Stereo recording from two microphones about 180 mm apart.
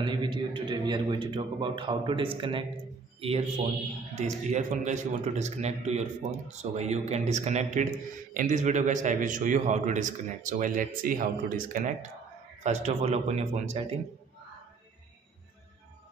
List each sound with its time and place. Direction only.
0.0 s a man's voice: 25° right (ahead or behind)